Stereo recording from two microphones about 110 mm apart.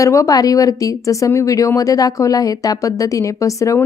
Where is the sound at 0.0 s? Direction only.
30° left (ahead or behind).